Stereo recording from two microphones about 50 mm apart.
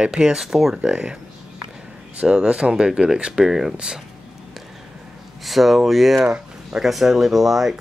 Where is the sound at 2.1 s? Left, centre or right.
Centre.